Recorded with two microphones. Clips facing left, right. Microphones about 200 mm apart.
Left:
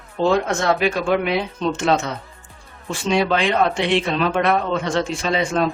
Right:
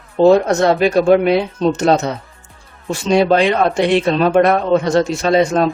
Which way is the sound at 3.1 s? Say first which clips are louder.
Right 6 dB; 40° right (ahead or behind).